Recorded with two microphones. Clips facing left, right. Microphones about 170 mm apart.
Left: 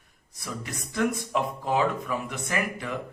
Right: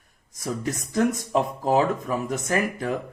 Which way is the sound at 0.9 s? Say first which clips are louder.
Right 4 dB; 40° right (ahead or behind).